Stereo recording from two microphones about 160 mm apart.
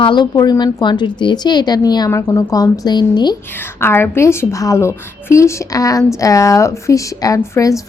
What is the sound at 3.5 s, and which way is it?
A woman's voice, 15° left (ahead or behind).